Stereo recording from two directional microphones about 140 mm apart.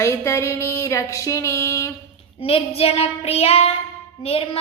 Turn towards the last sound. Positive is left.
turn(degrees=45)  # may be behind; listen again after turning